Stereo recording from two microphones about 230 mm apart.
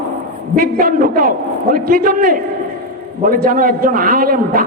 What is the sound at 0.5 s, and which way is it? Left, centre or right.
A man's voice, right.